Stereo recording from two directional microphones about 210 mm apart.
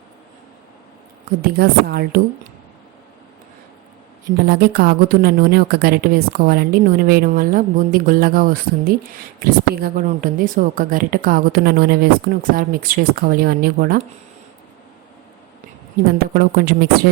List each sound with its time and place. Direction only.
1.4 s a woman's voice: 50° right (ahead or behind)
4.4 s a woman's voice: 45° right (ahead or behind)
16.1 s a woman's voice: 45° right (ahead or behind)